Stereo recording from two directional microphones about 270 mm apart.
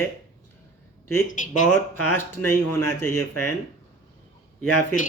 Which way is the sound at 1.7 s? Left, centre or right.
Centre.